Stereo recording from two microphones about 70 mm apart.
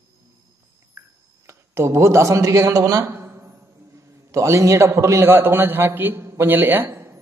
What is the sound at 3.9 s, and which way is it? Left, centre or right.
A man's voice, right.